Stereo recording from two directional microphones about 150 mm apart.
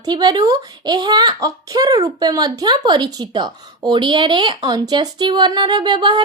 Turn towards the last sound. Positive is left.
turn(degrees=-30)  # may be behind; listen again after turning